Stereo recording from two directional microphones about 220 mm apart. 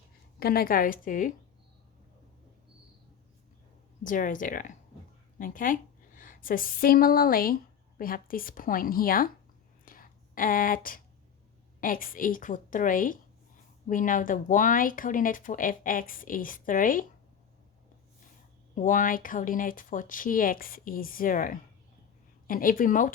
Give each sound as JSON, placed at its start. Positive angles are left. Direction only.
{"t": 0.3, "sound": "speech", "side_deg": 45}
{"t": 4.0, "sound": "a woman's voice", "side_deg": 35}
{"t": 9.8, "sound": "whispering", "side_deg": 40}
{"t": 11.8, "sound": "speech", "side_deg": 40}
{"t": 18.7, "sound": "speech", "side_deg": 35}